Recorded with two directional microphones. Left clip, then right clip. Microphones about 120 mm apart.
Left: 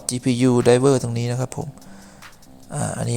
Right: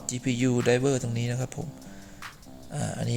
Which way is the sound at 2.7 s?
35° left (ahead or behind).